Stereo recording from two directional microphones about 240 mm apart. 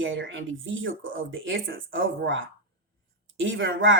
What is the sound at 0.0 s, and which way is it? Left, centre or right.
Speech, right.